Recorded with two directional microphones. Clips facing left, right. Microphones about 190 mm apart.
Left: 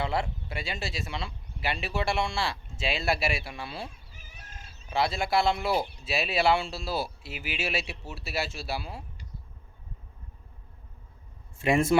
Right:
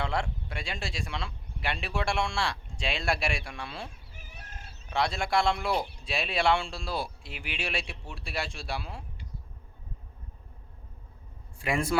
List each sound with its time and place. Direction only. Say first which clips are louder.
0.0 s speech: left 2 dB; 5° left (ahead or behind)
4.1 s chicken: right 3 dB; 55° right (ahead or behind)
4.9 s speech: left 2 dB; 5° left (ahead or behind)
11.6 s a man's voice: left 5 dB; 25° left (ahead or behind)